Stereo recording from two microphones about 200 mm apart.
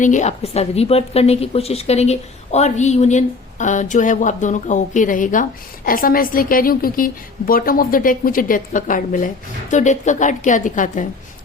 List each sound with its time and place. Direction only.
0.0 s a woman's voice: 35° left (ahead or behind)